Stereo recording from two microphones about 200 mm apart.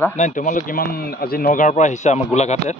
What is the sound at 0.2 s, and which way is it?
A man's voice, 40° left (ahead or behind).